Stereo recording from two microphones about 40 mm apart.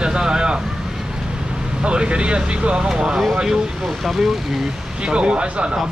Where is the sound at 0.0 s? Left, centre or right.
Right.